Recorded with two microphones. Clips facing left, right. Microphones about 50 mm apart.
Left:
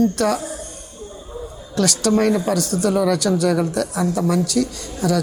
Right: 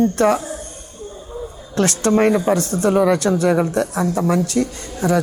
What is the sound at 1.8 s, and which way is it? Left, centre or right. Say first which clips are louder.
Speech: right 2 dB; right.